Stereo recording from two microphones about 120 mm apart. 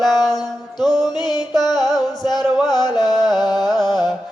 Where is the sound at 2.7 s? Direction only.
35° left (ahead or behind).